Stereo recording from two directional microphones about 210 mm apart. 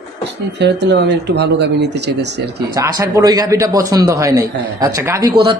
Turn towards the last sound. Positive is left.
turn(degrees=-15)  # may be behind; listen again after turning